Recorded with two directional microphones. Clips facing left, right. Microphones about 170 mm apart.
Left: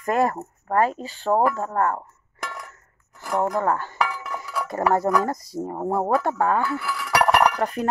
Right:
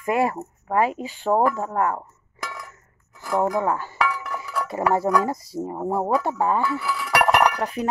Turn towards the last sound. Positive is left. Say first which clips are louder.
# even
turn(degrees=0)  # may be behind; listen again after turning